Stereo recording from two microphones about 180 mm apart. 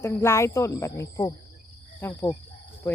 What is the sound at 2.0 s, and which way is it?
Cricket, 15° left (ahead or behind).